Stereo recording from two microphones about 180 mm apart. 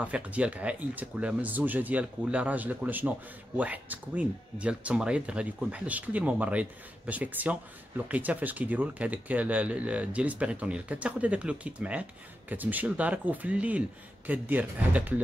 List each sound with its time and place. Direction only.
0.0 s speech: 5° right (ahead or behind)